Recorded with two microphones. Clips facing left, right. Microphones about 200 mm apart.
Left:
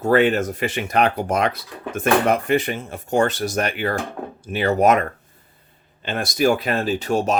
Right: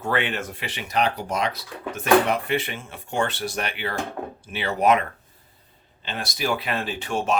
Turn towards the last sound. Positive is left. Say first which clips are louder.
# left 5 dB
turn(degrees=40)  # may be behind; listen again after turning